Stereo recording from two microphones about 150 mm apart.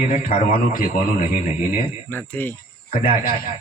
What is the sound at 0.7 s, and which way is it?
Speech, 70° left (ahead or behind).